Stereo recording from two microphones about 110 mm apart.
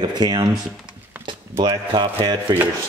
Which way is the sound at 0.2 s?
40° right (ahead or behind).